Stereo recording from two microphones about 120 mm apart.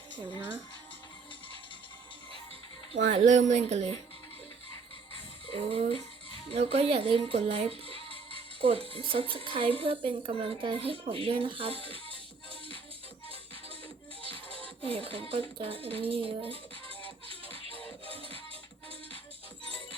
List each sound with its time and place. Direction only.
3.2 s speech: 90° right; by 3.9 s 65° right (ahead or behind)
5.5 s music: 50° right (ahead or behind)
6.5 s speech: 55° right (ahead or behind)
14.2 s music: 50° right (ahead or behind)
14.8 s speech: 50° right (ahead or behind)
17.2 s music: 50° right (ahead or behind)